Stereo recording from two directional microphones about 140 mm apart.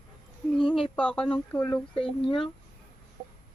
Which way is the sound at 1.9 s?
40° left (ahead or behind).